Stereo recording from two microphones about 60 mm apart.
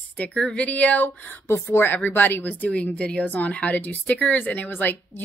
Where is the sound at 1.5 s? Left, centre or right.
Left.